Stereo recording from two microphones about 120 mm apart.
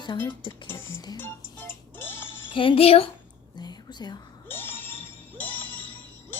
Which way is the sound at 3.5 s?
35° left (ahead or behind).